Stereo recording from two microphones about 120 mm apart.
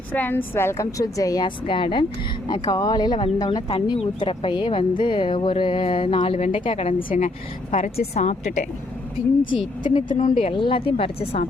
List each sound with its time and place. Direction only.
0.1 s a woman's voice: 15° left (ahead or behind); by 2.0 s 45° left (ahead or behind)
2.6 s a woman's voice: 30° left (ahead or behind); by 8.6 s 70° left (ahead or behind)
9.8 s speech: 45° left (ahead or behind)
10.2 s speech: 90° left
10.5 s speech: 45° left (ahead or behind)